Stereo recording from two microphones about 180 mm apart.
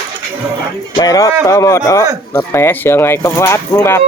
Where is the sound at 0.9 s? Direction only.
20° left (ahead or behind).